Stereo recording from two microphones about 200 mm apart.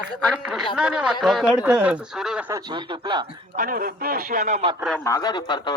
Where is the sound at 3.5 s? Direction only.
45° right (ahead or behind).